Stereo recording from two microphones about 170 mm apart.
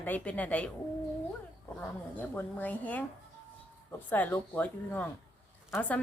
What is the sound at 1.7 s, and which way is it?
A woman's voice, 10° left (ahead or behind).